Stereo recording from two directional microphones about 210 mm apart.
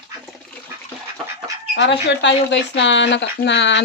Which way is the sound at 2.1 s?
60° left (ahead or behind).